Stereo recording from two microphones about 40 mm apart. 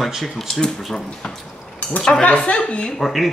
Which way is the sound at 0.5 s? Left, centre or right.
Centre.